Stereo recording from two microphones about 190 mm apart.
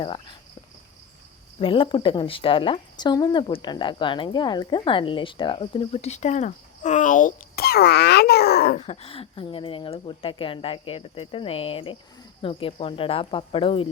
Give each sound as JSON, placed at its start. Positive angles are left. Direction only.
{"t": 0.0, "sound": "speech", "side_deg": 25}
{"t": 1.5, "sound": "speech", "side_deg": 30}
{"t": 8.8, "sound": "speech", "side_deg": 30}